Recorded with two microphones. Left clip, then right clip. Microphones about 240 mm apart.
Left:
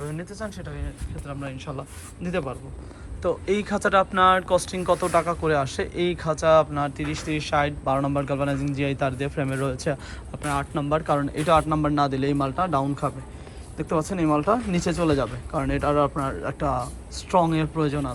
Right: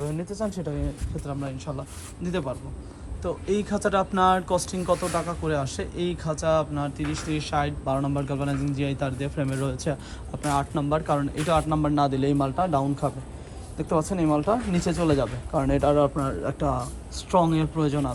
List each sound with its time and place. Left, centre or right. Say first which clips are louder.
0.1 s a woman's voice: right 4 dB; centre
4.9 s speech: left 5 dB; centre
5.3 s speech: left 5 dB; centre
17.3 s speech: left 1 dB; centre